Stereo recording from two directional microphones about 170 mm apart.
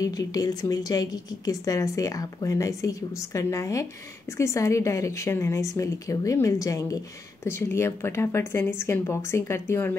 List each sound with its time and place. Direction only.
0.0 s a woman's voice: 20° left (ahead or behind)